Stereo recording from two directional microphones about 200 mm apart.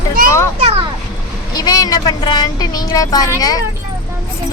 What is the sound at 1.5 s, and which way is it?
Speech, 20° left (ahead or behind).